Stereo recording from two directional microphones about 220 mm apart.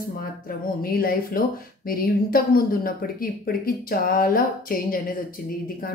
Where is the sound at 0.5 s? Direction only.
40° left (ahead or behind).